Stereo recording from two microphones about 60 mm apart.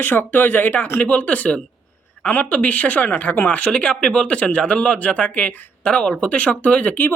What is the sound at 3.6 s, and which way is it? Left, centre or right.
Speech, centre.